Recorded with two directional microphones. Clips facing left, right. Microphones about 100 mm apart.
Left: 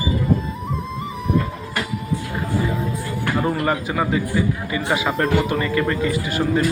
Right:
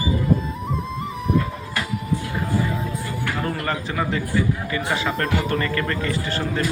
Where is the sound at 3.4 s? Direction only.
15° left (ahead or behind).